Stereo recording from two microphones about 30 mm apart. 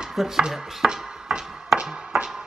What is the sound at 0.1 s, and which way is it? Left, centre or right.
Chopping, centre.